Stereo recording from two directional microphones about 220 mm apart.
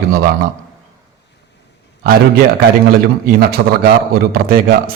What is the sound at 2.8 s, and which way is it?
A man's voice, 40° right (ahead or behind).